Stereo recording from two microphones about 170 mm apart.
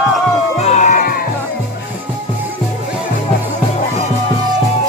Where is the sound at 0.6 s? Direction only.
45° left (ahead or behind).